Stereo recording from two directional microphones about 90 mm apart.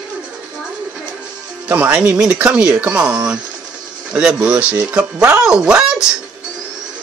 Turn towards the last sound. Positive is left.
turn(degrees=-10)  # may be behind; listen again after turning